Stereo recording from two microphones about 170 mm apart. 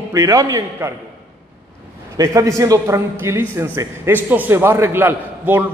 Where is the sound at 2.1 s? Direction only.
20° right (ahead or behind).